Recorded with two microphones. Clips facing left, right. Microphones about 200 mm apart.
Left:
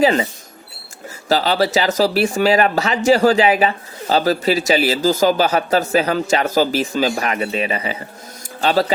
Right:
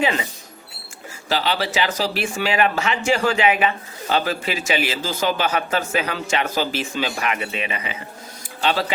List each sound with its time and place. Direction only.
0.0 s speech: 35° left (ahead or behind)
1.3 s speech: 40° left (ahead or behind)